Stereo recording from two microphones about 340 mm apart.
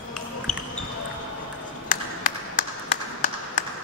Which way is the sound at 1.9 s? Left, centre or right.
Left.